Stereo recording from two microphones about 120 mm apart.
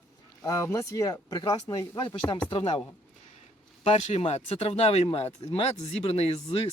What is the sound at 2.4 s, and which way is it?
Speech, 50° left (ahead or behind).